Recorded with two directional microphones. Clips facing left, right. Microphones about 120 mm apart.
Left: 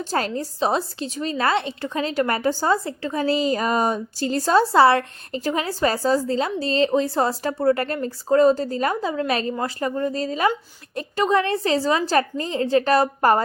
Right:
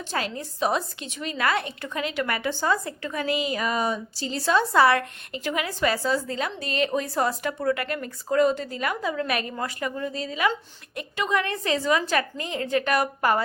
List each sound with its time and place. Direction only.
0.0 s a woman's voice: 40° left (ahead or behind)